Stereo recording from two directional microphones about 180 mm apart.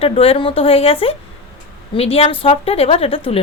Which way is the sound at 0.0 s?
30° left (ahead or behind).